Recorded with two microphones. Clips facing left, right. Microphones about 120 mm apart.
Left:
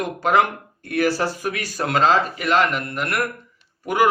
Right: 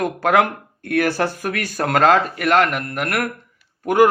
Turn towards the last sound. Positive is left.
turn(degrees=-50)  # may be behind; listen again after turning